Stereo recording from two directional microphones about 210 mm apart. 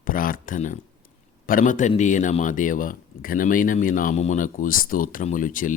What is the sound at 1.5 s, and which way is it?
Speech, 40° left (ahead or behind).